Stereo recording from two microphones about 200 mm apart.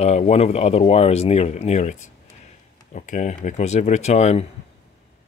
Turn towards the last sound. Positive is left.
turn(degrees=35)  # may be behind; listen again after turning